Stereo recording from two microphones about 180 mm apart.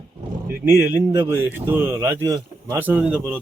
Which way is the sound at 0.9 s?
10° right (ahead or behind).